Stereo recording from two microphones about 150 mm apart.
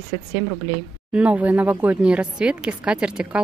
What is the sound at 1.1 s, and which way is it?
Speech, 10° right (ahead or behind).